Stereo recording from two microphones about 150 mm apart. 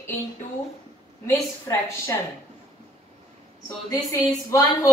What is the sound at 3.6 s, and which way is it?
A woman's voice, 20° left (ahead or behind).